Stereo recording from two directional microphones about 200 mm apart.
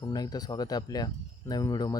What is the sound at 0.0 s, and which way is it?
Speech, 20° left (ahead or behind).